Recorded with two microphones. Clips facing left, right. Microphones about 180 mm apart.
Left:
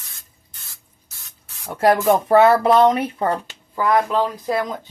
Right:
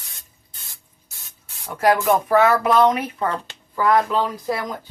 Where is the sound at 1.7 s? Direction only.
30° left (ahead or behind).